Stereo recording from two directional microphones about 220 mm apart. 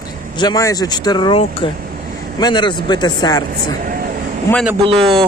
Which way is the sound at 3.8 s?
40° right (ahead or behind).